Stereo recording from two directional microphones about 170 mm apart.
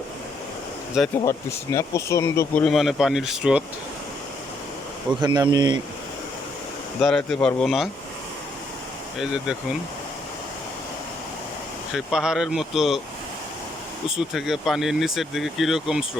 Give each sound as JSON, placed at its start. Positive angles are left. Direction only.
{"t": 1.2, "sound": "speech", "side_deg": 20}
{"t": 2.6, "sound": "speech", "side_deg": 0}
{"t": 5.2, "sound": "speech", "side_deg": -25}
{"t": 7.0, "sound": "speech", "side_deg": 5}
{"t": 9.1, "sound": "speech", "side_deg": -5}
{"t": 11.9, "sound": "speech", "side_deg": -5}
{"t": 14.1, "sound": "speech", "side_deg": 0}